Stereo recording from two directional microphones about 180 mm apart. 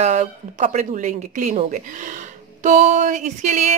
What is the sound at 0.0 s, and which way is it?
Speech, 40° right (ahead or behind).